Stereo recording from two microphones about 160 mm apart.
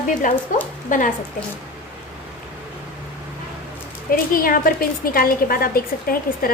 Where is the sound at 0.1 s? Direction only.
50° left (ahead or behind).